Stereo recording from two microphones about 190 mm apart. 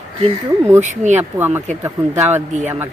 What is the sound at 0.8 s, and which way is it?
Speech, 40° right (ahead or behind).